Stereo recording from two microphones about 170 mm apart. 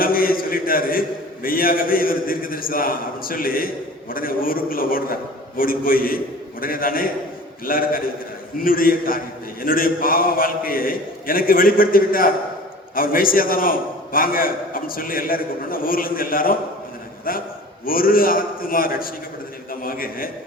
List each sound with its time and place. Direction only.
0.0 s a man's voice: 60° left (ahead or behind)